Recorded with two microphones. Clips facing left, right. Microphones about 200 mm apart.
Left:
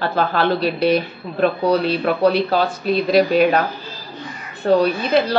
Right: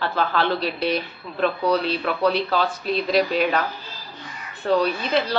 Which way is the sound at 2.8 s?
10° left (ahead or behind).